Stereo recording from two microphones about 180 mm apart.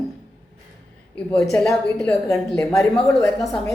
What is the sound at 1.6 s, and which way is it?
Speech, 5° left (ahead or behind).